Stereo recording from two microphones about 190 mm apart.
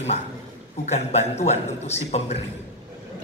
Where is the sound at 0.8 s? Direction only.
35° left (ahead or behind).